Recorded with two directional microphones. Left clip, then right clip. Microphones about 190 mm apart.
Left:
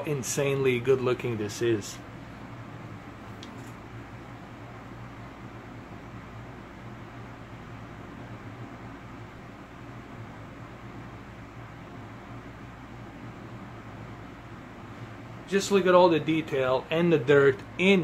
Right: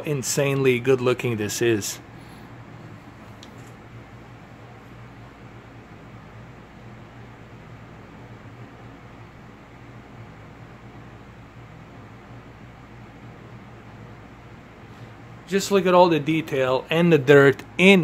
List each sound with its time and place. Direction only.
0.0 s speech: 45° right (ahead or behind)
15.5 s speech: 50° right (ahead or behind)